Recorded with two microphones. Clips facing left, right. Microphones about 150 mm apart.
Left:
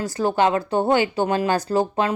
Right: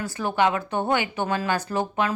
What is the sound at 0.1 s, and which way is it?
Speech, 40° left (ahead or behind).